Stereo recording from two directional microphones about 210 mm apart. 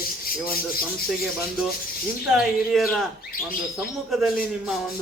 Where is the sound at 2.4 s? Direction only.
Centre (ahead or behind).